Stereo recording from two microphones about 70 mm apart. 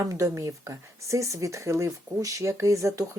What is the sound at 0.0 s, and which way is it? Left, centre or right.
Speech, right.